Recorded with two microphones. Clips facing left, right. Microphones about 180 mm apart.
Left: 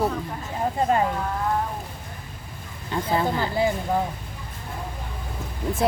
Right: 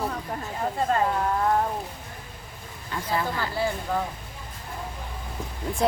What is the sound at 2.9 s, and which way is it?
Speech, 25° left (ahead or behind).